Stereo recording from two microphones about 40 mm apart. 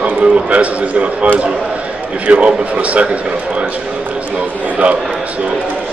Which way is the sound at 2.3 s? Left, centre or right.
Right.